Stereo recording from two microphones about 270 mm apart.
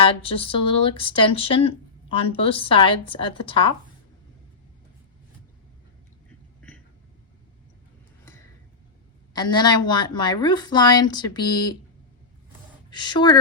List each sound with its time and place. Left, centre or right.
0.0 s speech: centre
9.3 s a woman's voice: centre
12.9 s a woman's voice: centre